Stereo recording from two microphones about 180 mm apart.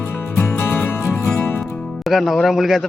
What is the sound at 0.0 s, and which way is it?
Music, 10° left (ahead or behind).